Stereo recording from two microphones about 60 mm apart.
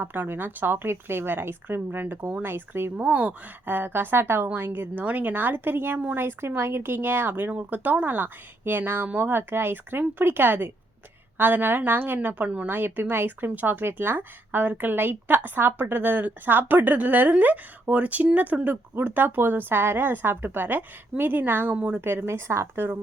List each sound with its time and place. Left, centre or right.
0.0 s a woman's voice: right
3.0 s a woman's voice: right
21.8 s a woman's voice: right
22.0 s a woman's voice: right